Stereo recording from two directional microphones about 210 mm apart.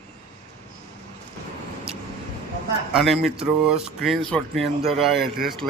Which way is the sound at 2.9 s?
Centre (ahead or behind).